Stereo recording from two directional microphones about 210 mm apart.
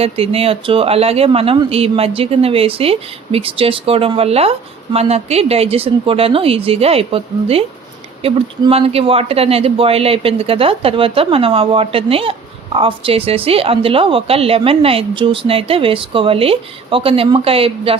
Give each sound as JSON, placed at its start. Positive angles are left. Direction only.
{"t": 0.0, "sound": "speech", "side_deg": -30}